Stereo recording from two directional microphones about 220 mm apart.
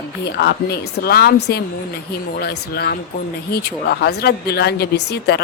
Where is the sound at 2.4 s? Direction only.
45° left (ahead or behind).